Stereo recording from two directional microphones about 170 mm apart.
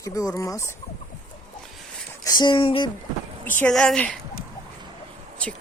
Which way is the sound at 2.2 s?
25° left (ahead or behind).